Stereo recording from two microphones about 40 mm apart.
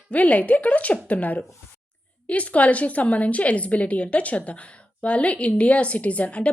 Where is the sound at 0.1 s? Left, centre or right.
Left.